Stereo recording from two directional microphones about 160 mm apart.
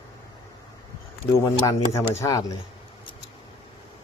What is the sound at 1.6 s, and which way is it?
Speech, 20° left (ahead or behind).